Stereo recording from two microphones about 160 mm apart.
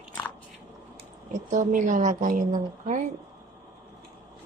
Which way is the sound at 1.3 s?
50° right (ahead or behind).